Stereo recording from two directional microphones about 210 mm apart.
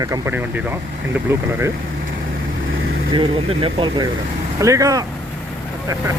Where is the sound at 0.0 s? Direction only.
15° right (ahead or behind).